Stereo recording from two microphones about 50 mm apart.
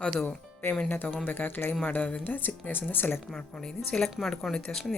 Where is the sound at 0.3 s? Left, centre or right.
Left.